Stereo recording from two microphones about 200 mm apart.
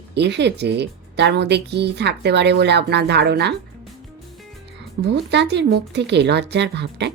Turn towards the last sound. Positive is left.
turn(degrees=-55)  # may be behind; listen again after turning